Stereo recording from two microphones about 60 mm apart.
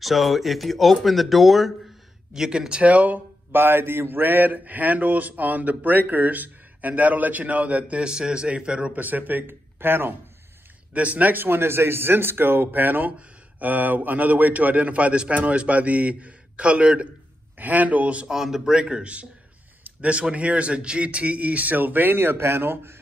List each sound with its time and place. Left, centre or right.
0.0 s a man's voice: centre; by 3.2 s right
3.5 s speech: right; by 9.0 s centre
9.0 s speech: right
10.9 s speech: right
18.3 s a man's voice: centre; by 22.9 s right